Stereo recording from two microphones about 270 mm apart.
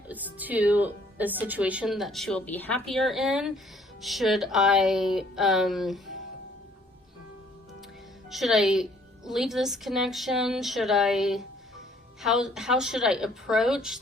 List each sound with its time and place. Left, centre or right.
0.1 s a woman's voice: centre
8.3 s a woman's voice: centre